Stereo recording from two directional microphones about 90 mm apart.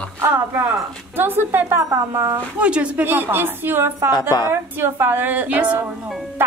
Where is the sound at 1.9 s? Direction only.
35° right (ahead or behind).